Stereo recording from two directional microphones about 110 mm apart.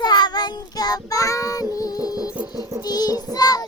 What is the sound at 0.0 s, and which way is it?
Child singing, 40° left (ahead or behind).